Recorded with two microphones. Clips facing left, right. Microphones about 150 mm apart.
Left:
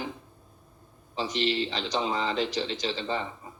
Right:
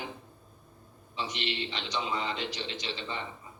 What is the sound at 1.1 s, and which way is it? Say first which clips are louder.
A man's voice: left 7 dB; 35° left (ahead or behind).